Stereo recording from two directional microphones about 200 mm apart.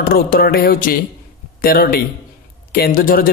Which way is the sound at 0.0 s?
50° left (ahead or behind).